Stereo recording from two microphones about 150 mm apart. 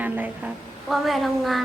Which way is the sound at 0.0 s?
10° right (ahead or behind).